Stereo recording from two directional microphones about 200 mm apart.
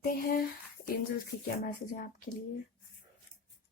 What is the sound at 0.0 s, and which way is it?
Speech, 45° left (ahead or behind).